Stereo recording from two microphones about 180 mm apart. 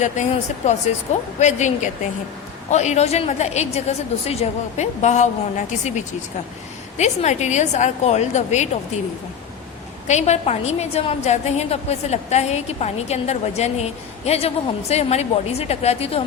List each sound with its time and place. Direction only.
0.0 s a woman's voice: 40° left (ahead or behind)
6.9 s a woman's voice: 40° left (ahead or behind)
10.1 s a woman's voice: 40° left (ahead or behind)